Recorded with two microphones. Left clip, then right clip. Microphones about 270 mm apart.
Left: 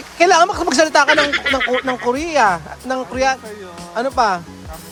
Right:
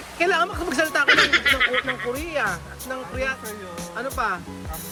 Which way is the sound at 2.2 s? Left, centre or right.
Left.